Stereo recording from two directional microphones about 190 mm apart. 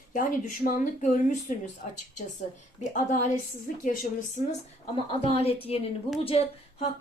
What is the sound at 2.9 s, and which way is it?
A woman's voice, 40° left (ahead or behind).